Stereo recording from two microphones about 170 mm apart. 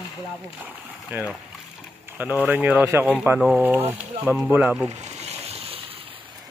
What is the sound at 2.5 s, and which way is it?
Speech, 10° right (ahead or behind).